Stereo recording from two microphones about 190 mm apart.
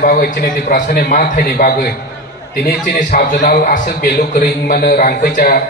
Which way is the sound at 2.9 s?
50° left (ahead or behind).